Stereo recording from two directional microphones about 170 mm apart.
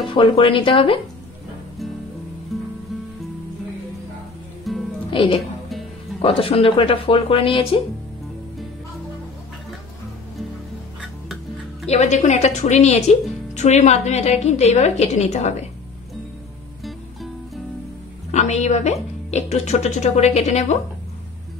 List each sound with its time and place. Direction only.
0.0 s a woman's voice: 30° left (ahead or behind)
2.5 s music: centre (ahead or behind)
4.7 s music: centre (ahead or behind)
5.1 s a woman's voice: 30° left (ahead or behind)
11.8 s a woman's voice: 40° left (ahead or behind)
18.3 s a woman's voice: 40° left (ahead or behind)